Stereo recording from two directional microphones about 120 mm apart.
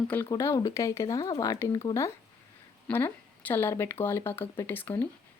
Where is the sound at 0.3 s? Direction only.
25° left (ahead or behind).